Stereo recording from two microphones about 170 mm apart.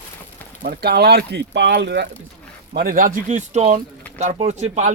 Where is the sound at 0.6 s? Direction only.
65° right (ahead or behind); by 2.1 s 85° right.